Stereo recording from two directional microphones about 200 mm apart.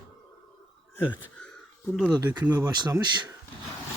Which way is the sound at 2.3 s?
10° right (ahead or behind).